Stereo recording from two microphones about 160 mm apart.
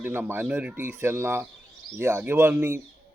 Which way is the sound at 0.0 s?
15° right (ahead or behind).